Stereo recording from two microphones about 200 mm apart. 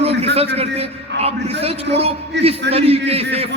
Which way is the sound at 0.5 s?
30° right (ahead or behind).